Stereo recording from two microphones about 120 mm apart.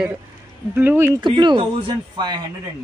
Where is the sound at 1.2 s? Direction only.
40° right (ahead or behind).